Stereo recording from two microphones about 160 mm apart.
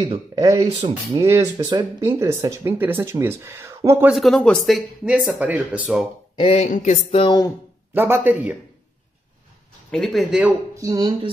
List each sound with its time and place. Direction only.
0.0 s speech: 25° right (ahead or behind)
4.1 s speech: centre (ahead or behind)
6.3 s speech: 40° left (ahead or behind)
6.7 s a sound: 50° left (ahead or behind)
7.1 s speech: 35° left (ahead or behind)
7.9 s speech: 15° right (ahead or behind)
9.8 s speech: centre (ahead or behind)
10.8 s speech: 20° right (ahead or behind)